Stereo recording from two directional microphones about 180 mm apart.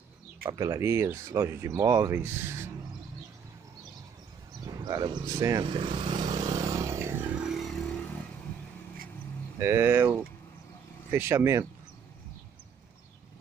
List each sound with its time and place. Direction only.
0.5 s speech: 20° right (ahead or behind)
4.6 s speech: 25° right (ahead or behind)
5.7 s vehicle: 30° right (ahead or behind)
7.4 s vehicle: centre (ahead or behind)
9.6 s speech: 15° right (ahead or behind)